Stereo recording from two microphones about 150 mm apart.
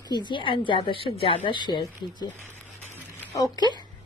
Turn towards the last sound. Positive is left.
turn(degrees=30)  # may be behind; listen again after turning